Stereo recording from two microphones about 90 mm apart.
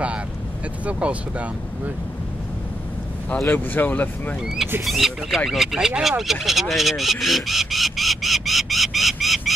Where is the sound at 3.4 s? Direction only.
20° left (ahead or behind).